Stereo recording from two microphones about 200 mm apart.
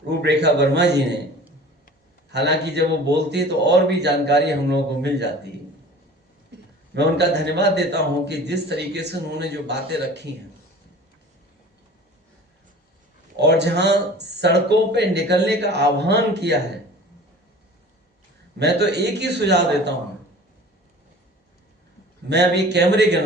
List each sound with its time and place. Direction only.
0.1 s a man's voice: 55° right (ahead or behind)
2.3 s a man's voice: 55° right (ahead or behind)
6.9 s a man's voice: 55° right (ahead or behind)
13.4 s a man's voice: 55° right (ahead or behind)
18.6 s a man's voice: 55° right (ahead or behind)
22.3 s a man's voice: 55° right (ahead or behind)